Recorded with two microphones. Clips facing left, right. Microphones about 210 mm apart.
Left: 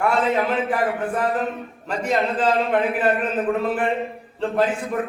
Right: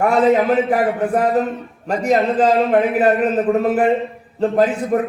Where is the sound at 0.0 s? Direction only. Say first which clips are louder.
Right 6 dB; 40° right (ahead or behind).